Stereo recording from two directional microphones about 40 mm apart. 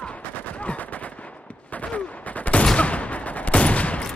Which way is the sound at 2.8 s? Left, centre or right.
Left.